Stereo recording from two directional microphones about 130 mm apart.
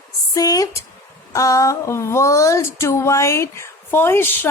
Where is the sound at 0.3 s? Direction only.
25° left (ahead or behind).